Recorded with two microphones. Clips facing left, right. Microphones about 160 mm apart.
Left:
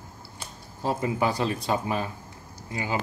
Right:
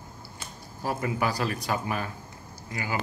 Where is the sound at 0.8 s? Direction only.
20° left (ahead or behind).